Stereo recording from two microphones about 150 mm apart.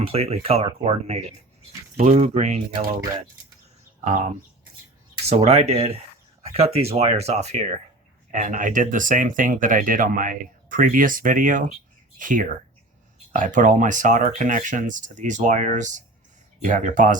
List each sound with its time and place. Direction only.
0.0 s speech: 45° right (ahead or behind)
5.3 s speech: 45° right (ahead or behind)
8.3 s speech: 60° right (ahead or behind)